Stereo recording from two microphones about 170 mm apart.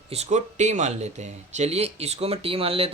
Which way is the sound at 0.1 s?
40° right (ahead or behind).